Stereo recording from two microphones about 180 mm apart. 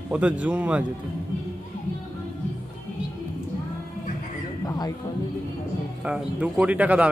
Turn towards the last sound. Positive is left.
turn(degrees=-5)  # may be behind; listen again after turning